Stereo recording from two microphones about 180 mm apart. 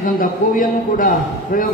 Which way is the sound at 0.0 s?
50° left (ahead or behind).